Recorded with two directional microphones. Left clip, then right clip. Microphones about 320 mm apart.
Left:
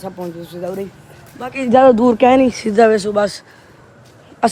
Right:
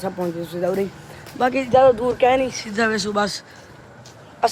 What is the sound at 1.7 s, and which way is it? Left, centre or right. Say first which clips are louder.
Speech: left 6 dB; left.